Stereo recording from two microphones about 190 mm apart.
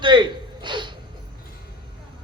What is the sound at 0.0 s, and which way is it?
Gasp, 25° right (ahead or behind).